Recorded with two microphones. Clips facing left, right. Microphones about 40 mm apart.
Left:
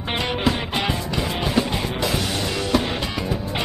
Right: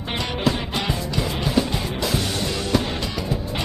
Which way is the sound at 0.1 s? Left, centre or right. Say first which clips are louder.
Left 1 dB; left.